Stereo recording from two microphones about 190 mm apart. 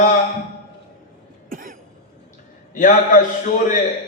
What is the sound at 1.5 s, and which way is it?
Cough, 45° right (ahead or behind).